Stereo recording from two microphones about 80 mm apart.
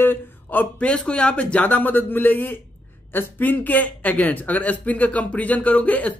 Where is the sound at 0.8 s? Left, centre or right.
Centre.